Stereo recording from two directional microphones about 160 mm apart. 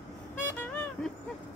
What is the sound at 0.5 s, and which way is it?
Vehicle, 10° left (ahead or behind).